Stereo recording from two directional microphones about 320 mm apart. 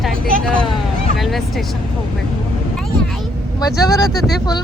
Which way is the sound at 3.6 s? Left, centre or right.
Centre.